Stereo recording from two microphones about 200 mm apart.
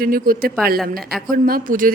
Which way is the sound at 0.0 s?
45° right (ahead or behind).